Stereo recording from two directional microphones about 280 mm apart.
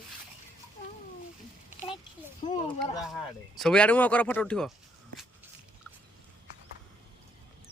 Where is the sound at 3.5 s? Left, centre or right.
Centre.